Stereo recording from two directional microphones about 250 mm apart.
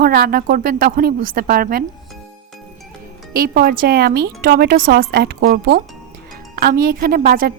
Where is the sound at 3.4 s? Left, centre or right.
Right.